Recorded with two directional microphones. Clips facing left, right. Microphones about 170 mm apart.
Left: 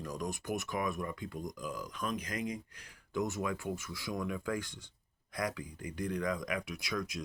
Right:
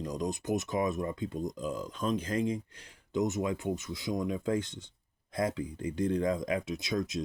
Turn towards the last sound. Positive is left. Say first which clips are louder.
# right 6 dB
turn(degrees=-25)  # may be behind; listen again after turning